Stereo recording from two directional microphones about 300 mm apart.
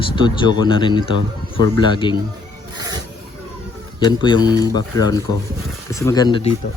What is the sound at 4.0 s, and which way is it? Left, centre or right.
Speech, centre.